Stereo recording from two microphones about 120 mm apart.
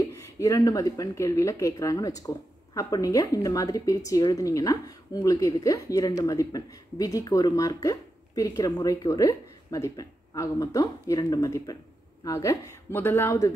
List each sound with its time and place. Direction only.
0.0 s speech: 25° left (ahead or behind)